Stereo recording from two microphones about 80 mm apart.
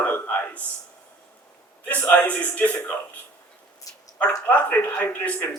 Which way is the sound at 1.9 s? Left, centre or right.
Left.